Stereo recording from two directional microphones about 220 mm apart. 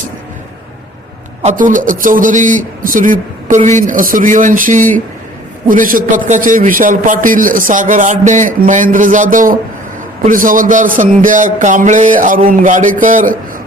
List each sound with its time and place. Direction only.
1.4 s a man's voice: 35° right (ahead or behind)